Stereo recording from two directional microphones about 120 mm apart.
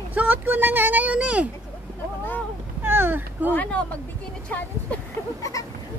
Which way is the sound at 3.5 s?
10° left (ahead or behind).